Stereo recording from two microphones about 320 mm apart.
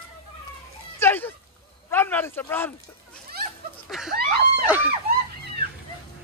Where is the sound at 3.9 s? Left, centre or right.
Centre.